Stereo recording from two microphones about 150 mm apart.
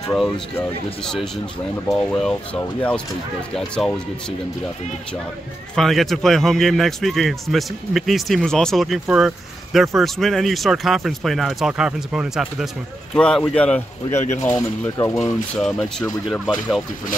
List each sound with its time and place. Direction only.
1.9 s a man's voice: 5° left (ahead or behind)
3.5 s a man's voice: 5° left (ahead or behind)
5.8 s a man's voice: centre (ahead or behind); by 15.1 s 20° left (ahead or behind)
15.1 s a man's voice: 5° left (ahead or behind)